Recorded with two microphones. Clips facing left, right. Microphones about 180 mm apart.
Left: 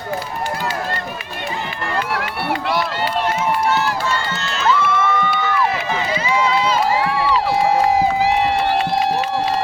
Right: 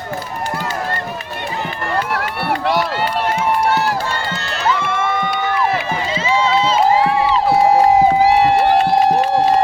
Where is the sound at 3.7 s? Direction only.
50° right (ahead or behind).